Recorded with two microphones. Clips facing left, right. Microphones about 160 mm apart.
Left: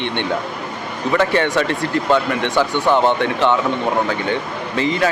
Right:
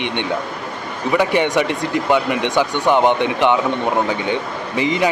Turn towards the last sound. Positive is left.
turn(degrees=-15)  # may be behind; listen again after turning